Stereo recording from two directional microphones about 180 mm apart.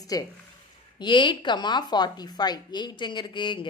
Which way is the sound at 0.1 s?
20° left (ahead or behind).